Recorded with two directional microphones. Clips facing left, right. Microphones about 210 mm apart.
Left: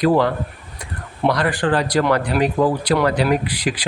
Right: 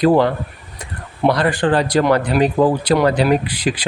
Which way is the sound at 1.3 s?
30° right (ahead or behind).